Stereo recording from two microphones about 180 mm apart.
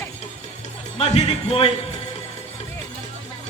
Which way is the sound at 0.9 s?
35° left (ahead or behind).